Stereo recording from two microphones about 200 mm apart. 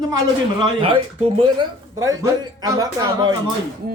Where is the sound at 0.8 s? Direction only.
25° right (ahead or behind).